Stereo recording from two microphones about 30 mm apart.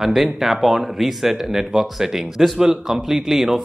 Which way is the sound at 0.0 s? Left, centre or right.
Centre.